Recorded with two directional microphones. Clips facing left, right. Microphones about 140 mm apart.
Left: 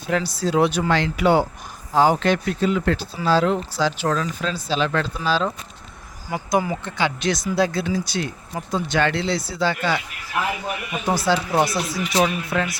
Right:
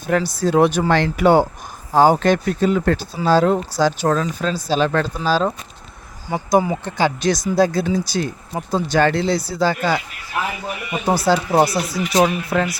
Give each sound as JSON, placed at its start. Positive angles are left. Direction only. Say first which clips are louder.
{"t": 0.1, "sound": "speech", "louder": "right 4 dB", "side_deg": -45}
{"t": 6.3, "sound": "speech", "louder": "right 5 dB", "side_deg": -30}
{"t": 11.3, "sound": "speech", "louder": "right 4 dB", "side_deg": -35}